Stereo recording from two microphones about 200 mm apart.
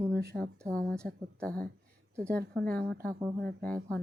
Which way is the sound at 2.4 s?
50° right (ahead or behind).